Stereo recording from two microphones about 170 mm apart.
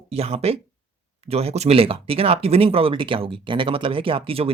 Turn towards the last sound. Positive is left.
turn(degrees=-35)  # may be behind; listen again after turning